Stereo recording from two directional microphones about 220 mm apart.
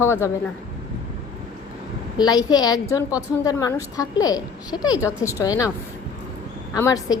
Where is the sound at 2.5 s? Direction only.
15° left (ahead or behind).